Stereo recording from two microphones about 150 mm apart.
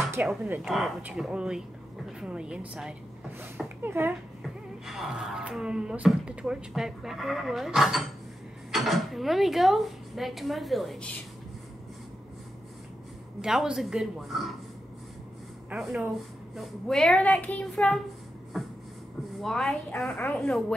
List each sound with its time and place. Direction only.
0.2 s speech: 10° right (ahead or behind)
0.7 s a woman's voice: centre (ahead or behind); by 4.1 s 15° right (ahead or behind)
4.4 s speech: centre (ahead or behind)
13.4 s speech: 5° right (ahead or behind)
15.7 s speech: centre (ahead or behind)
18.5 s a sound: centre (ahead or behind)
19.3 s a woman's voice: centre (ahead or behind)